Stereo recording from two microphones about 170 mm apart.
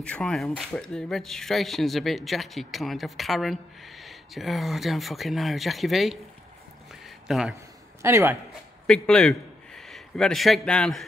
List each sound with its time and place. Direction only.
0.0 s speech: 5° left (ahead or behind)
6.9 s a sound: centre (ahead or behind)
8.0 s a man's voice: 15° right (ahead or behind)
8.8 s a man's voice: 5° left (ahead or behind)